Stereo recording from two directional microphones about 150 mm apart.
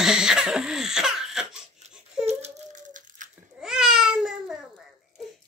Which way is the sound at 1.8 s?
50° right (ahead or behind).